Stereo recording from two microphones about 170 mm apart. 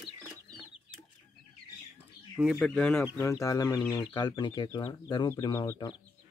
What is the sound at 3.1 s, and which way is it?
Speech, 20° left (ahead or behind).